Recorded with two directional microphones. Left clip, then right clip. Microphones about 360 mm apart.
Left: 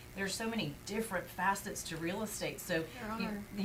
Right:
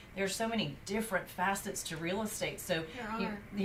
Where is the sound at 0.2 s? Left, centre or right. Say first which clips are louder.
Right 3 dB; centre.